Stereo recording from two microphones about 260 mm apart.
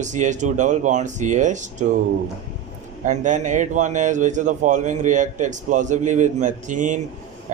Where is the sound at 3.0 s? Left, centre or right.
Right.